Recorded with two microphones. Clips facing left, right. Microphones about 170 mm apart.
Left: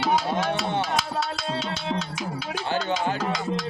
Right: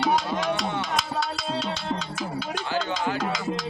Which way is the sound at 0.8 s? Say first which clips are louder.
Left 2 dB; centre (ahead or behind).